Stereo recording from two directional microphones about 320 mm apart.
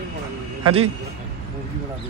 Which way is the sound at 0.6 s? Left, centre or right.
Centre.